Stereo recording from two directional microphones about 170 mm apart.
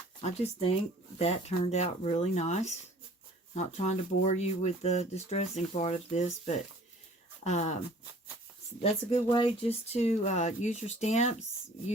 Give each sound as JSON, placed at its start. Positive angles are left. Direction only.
{"t": 0.2, "sound": "speech", "side_deg": 40}
{"t": 8.8, "sound": "speech", "side_deg": 35}